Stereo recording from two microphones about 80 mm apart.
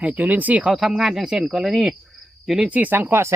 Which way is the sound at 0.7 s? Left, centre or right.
Centre.